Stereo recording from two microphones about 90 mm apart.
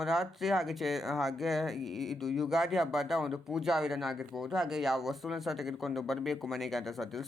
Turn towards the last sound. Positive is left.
turn(degrees=0)  # may be behind; listen again after turning